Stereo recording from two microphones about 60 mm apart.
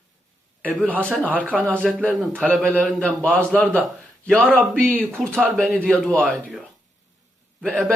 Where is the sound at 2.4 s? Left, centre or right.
Centre.